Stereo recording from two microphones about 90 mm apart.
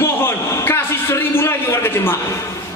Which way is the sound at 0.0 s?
30° left (ahead or behind).